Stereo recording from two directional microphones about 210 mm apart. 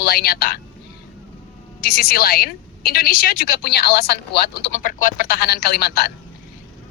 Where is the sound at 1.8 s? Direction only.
45° left (ahead or behind).